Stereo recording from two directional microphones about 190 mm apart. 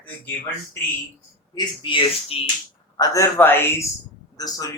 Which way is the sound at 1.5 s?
25° left (ahead or behind).